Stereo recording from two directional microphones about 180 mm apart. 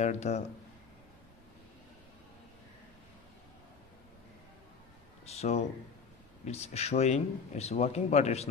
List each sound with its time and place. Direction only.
0.0 s a man's voice: 40° left (ahead or behind)
5.2 s a sound: 35° left (ahead or behind)
6.4 s a man's voice: 35° left (ahead or behind)